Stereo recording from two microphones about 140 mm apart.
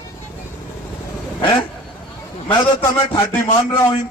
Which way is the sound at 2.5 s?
35° left (ahead or behind).